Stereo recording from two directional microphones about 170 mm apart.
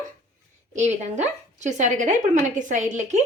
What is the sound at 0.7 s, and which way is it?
A woman's voice, 40° right (ahead or behind).